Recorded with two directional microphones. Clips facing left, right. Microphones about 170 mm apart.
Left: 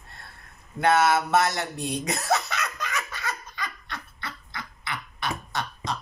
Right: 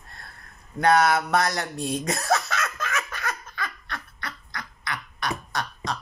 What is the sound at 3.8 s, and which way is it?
Duck, 25° left (ahead or behind).